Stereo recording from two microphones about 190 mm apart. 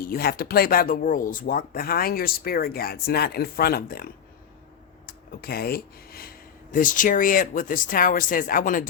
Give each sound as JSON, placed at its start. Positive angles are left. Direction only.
{"t": 0.0, "sound": "speech", "side_deg": 50}